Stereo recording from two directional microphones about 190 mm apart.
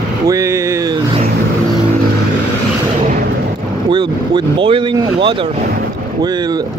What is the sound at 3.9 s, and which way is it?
Speech, 25° right (ahead or behind).